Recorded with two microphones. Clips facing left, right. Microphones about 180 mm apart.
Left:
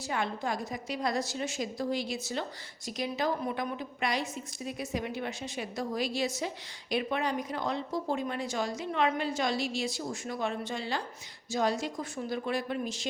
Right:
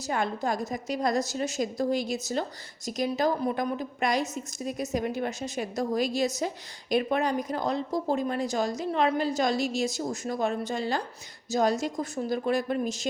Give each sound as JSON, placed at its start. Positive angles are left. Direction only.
{"t": 0.1, "sound": "a woman's voice", "side_deg": -45}